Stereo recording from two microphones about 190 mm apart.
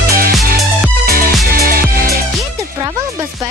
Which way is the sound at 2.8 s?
15° right (ahead or behind).